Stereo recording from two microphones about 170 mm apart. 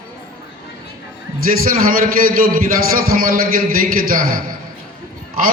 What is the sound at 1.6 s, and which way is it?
A man's voice, 55° right (ahead or behind).